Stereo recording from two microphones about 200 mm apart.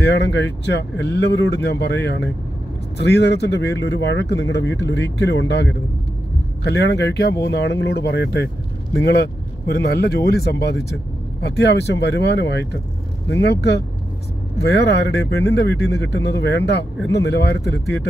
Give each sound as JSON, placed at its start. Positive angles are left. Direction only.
{"t": 0.0, "sound": "speech", "side_deg": 60}